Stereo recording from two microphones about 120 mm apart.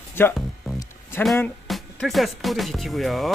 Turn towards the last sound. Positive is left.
turn(degrees=0)  # may be behind; listen again after turning